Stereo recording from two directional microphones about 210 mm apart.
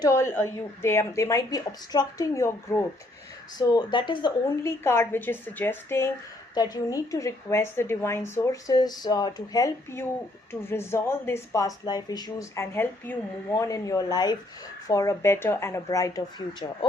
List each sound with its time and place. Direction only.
0.0 s speech: 15° left (ahead or behind)